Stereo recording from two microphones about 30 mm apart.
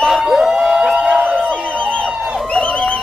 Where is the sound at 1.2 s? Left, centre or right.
Right.